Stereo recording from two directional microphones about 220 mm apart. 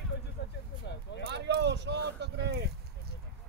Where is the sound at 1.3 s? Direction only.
50° right (ahead or behind).